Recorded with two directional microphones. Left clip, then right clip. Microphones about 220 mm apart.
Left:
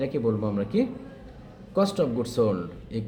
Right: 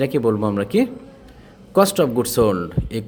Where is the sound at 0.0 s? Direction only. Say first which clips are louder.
Right 8 dB; 45° right (ahead or behind).